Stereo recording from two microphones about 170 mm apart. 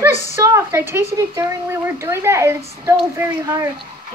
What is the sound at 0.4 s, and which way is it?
Speech, 15° right (ahead or behind).